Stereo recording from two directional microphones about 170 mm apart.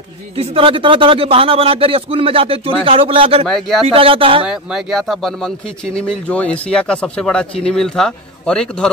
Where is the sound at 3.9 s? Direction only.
35° right (ahead or behind).